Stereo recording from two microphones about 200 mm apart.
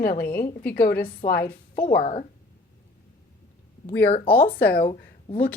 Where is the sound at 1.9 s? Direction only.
30° left (ahead or behind).